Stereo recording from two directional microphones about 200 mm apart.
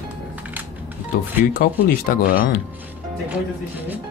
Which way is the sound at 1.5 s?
45° left (ahead or behind).